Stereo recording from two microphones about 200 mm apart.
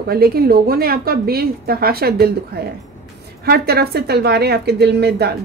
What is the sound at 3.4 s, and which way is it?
A woman's voice, 50° right (ahead or behind).